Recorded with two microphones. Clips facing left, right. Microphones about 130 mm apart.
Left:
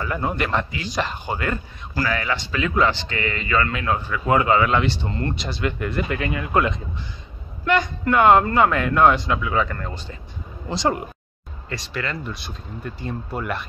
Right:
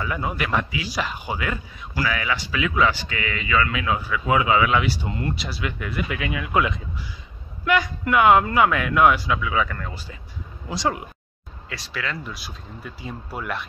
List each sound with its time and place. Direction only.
0.0 s speech: 5° right (ahead or behind)